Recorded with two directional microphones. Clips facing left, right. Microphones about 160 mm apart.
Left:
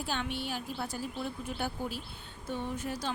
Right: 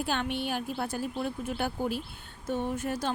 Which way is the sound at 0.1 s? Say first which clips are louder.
Right 3 dB; 60° right (ahead or behind).